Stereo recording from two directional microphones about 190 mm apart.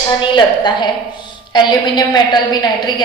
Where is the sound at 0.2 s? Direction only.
25° left (ahead or behind).